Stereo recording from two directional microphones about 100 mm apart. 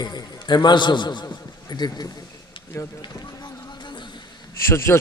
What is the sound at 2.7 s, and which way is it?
Speech, 25° left (ahead or behind).